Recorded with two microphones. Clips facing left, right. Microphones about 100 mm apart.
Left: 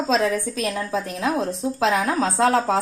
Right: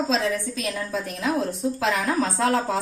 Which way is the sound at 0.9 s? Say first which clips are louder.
Left 1 dB; 90° left.